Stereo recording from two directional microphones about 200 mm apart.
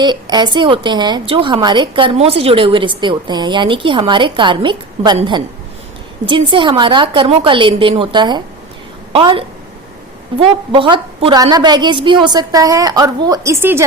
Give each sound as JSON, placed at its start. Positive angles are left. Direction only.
{"t": 0.0, "sound": "a woman's voice", "side_deg": -20}
{"t": 10.4, "sound": "a woman's voice", "side_deg": -25}